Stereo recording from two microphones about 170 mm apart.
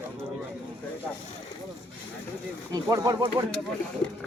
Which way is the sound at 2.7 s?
20° right (ahead or behind).